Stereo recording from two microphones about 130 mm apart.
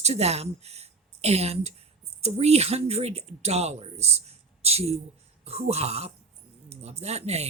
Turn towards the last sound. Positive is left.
turn(degrees=-55)  # may be behind; listen again after turning